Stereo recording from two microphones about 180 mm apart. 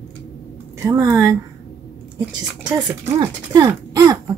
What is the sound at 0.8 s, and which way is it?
Speech, 15° right (ahead or behind).